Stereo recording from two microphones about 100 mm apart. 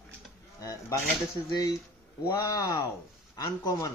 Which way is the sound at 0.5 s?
30° left (ahead or behind).